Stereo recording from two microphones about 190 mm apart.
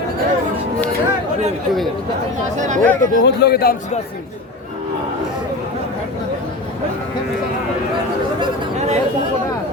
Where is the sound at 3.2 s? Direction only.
60° left (ahead or behind).